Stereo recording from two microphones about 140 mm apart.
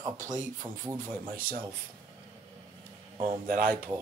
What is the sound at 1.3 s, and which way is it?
Speech, 90° right.